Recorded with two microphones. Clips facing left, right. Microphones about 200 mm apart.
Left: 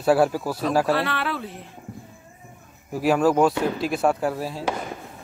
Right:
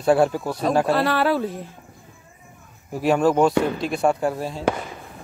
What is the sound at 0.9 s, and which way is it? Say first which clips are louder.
Speech: right 6 dB; 40° right (ahead or behind).